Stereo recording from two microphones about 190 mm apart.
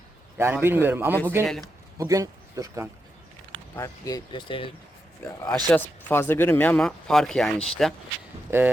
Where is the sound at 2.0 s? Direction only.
15° right (ahead or behind).